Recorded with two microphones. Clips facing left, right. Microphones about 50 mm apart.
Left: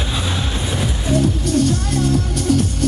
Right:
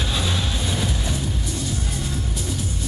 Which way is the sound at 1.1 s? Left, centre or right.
Left.